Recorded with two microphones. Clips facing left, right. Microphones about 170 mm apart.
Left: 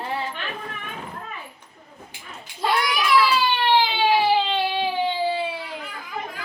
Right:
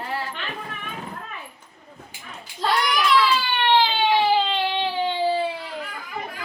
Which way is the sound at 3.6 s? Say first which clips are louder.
Right 2 dB; 10° left (ahead or behind).